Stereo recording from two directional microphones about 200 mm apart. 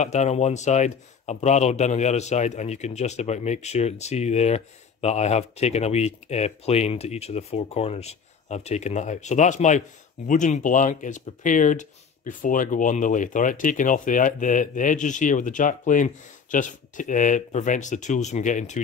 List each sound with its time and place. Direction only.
0.0 s speech: 35° left (ahead or behind)